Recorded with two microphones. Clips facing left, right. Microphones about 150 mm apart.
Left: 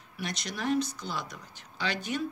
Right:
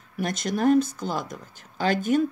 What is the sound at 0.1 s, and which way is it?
Speech, 50° right (ahead or behind).